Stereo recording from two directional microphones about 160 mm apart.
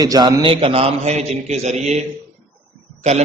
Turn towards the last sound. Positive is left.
turn(degrees=-45)  # may be behind; listen again after turning